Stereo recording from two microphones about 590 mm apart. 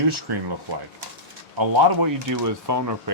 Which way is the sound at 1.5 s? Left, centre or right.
Right.